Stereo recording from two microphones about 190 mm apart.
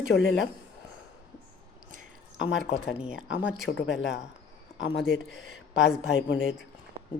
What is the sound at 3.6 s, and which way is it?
Speech, 75° left (ahead or behind).